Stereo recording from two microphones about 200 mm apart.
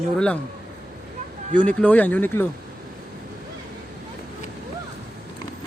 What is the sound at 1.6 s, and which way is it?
Speech, 10° left (ahead or behind).